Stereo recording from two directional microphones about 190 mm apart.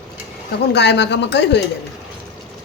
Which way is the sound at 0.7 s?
65° left (ahead or behind).